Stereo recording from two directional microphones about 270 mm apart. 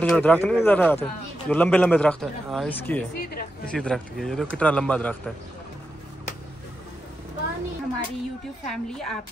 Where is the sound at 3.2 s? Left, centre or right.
Left.